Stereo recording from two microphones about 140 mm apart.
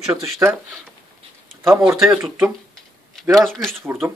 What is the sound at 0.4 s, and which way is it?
Speech, 25° right (ahead or behind).